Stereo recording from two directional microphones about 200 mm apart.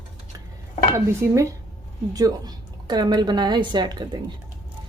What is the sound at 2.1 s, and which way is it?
A woman's voice, 20° right (ahead or behind).